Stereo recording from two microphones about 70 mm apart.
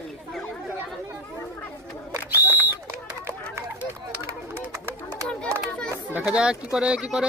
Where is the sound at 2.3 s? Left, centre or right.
Right.